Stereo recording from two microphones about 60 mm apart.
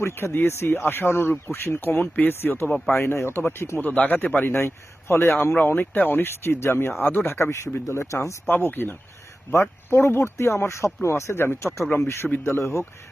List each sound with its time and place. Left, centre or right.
0.0 s speech: left
2.6 s speech: centre
3.0 s speech: left
3.8 s speech: left
4.4 s speech: left
5.5 s speech: left
8.4 s speech: left
9.5 s speech: left